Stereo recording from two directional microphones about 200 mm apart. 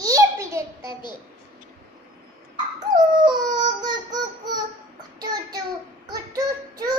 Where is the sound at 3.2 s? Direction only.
20° right (ahead or behind).